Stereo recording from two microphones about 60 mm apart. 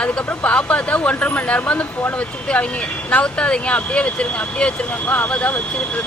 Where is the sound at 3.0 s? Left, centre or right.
Left.